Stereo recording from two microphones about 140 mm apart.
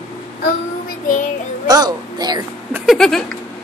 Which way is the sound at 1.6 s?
30° right (ahead or behind).